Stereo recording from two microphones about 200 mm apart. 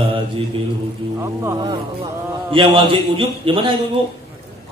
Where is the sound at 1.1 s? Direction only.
20° right (ahead or behind).